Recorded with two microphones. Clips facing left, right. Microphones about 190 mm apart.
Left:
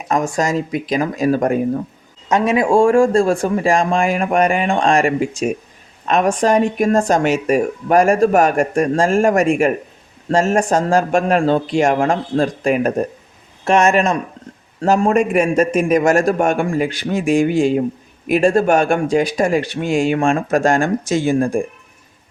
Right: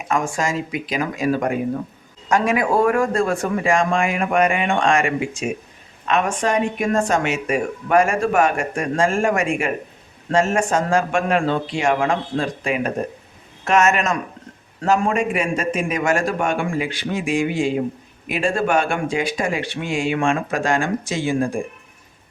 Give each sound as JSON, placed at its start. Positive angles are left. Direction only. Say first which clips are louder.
{"t": 0.1, "sound": "speech", "louder": "left 4 dB", "side_deg": 40}
{"t": 2.3, "sound": "speech", "louder": "left 4 dB", "side_deg": 25}
{"t": 13.7, "sound": "speech", "louder": "left 4 dB", "side_deg": 35}